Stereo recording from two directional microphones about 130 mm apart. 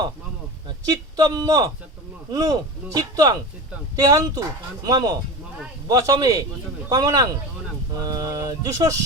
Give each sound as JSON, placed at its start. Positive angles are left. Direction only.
{"t": 0.9, "sound": "a man's voice", "side_deg": -30}